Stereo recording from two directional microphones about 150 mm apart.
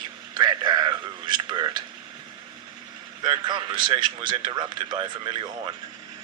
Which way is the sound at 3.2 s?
30° right (ahead or behind).